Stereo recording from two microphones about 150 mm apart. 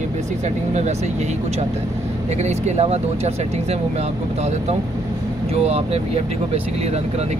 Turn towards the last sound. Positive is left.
turn(degrees=-40)  # may be behind; listen again after turning